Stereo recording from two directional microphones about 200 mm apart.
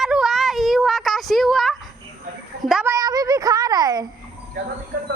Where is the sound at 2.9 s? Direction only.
20° right (ahead or behind).